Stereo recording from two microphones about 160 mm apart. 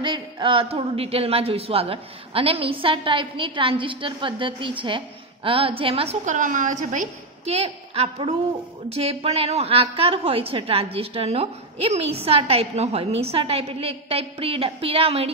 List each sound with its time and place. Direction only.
0.0 s a woman's voice: 30° right (ahead or behind)
6.2 s a woman's voice: 55° right (ahead or behind)